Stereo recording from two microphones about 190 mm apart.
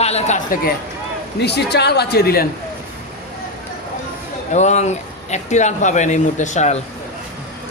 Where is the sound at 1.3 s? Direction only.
60° left (ahead or behind).